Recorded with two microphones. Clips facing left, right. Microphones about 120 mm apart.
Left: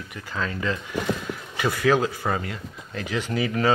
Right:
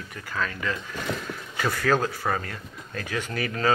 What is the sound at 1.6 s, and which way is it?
Speech, 15° left (ahead or behind).